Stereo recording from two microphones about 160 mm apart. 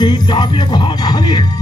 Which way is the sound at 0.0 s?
25° left (ahead or behind).